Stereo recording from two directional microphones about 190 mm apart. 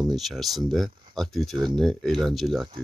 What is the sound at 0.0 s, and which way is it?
Speech, centre (ahead or behind).